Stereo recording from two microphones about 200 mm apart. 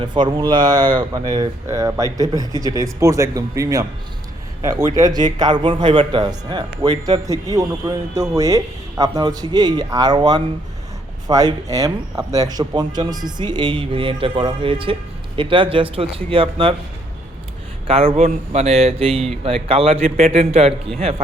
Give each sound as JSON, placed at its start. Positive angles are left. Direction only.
{"t": 0.0, "sound": "speech", "side_deg": -20}
{"t": 17.8, "sound": "speech", "side_deg": -30}